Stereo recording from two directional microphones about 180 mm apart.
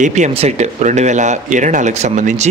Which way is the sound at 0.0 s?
40° right (ahead or behind).